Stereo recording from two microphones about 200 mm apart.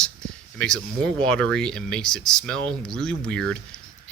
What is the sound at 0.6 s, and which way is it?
Speech, 5° left (ahead or behind).